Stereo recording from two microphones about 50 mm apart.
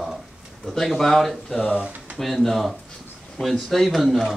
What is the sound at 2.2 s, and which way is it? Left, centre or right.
Speech, centre.